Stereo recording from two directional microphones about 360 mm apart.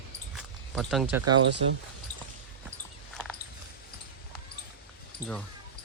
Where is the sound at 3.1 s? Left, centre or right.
Centre.